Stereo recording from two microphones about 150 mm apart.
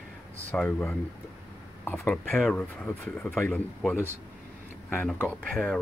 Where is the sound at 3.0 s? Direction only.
15° left (ahead or behind).